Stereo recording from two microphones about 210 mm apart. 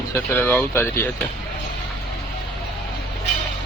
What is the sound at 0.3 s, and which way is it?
Speech, 10° left (ahead or behind).